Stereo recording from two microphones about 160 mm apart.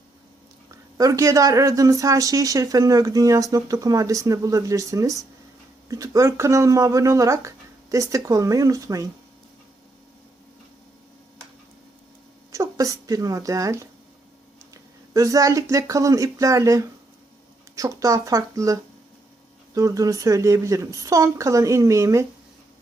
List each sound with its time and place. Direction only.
0.7 s speech: 20° right (ahead or behind)
12.5 s speech: 20° right (ahead or behind)